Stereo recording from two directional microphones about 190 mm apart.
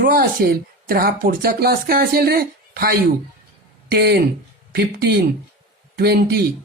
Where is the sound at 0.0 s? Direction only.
50° right (ahead or behind).